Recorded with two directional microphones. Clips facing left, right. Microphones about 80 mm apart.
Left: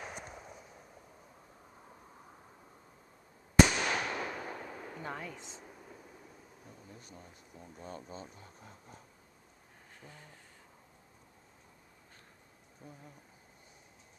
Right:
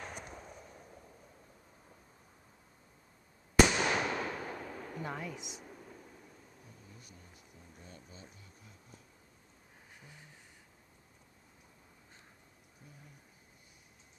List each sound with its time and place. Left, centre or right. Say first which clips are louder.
0.0 s fireworks: left 1 dB; centre
3.6 s fireworks: right 2 dB; centre
4.2 s firecracker: right 1 dB; centre
5.4 s speech: right 1 dB; centre
6.9 s speech: left 4 dB; left
9.9 s a sound: left 4 dB; centre
12.8 s speech: left 7 dB; left